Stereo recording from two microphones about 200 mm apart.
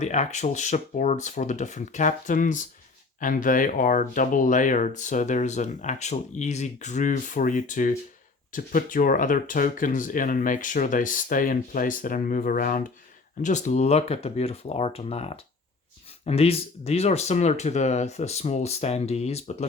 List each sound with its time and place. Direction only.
0.0 s speech: 35° left (ahead or behind)